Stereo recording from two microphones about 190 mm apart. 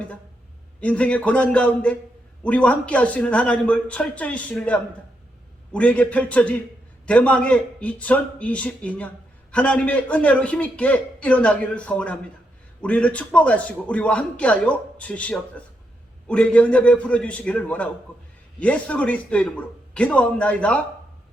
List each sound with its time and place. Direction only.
0.8 s a man's voice: 5° left (ahead or behind)